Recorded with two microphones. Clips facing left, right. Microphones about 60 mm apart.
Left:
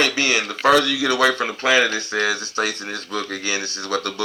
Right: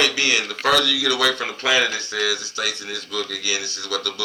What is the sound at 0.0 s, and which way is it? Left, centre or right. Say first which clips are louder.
Speech: left 1 dB; left.